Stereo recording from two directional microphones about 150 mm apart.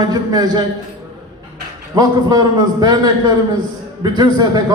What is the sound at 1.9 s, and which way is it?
A man's voice, 25° right (ahead or behind).